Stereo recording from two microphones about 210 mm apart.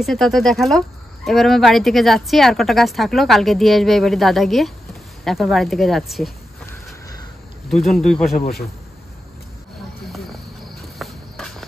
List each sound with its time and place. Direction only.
0.0 s speech: centre (ahead or behind)
7.7 s speech: centre (ahead or behind)
11.0 s cricket: centre (ahead or behind)